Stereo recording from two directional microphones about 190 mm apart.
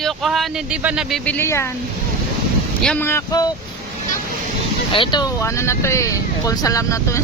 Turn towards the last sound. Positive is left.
turn(degrees=15)  # may be behind; listen again after turning